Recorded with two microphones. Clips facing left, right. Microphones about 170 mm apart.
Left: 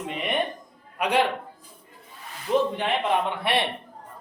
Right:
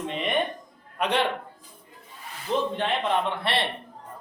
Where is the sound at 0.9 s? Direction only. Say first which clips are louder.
Left 2 dB; 10° left (ahead or behind).